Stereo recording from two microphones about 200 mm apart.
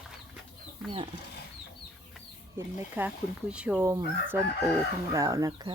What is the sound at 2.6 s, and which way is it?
Speech, 10° right (ahead or behind).